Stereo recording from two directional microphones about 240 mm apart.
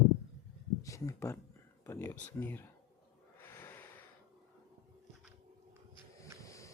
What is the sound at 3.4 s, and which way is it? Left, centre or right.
Snort, centre.